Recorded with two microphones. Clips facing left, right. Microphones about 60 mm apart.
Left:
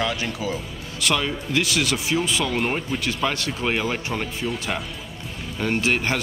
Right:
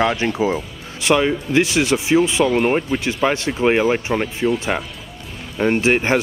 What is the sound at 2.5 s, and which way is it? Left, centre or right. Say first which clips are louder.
Speech: right 7 dB; centre.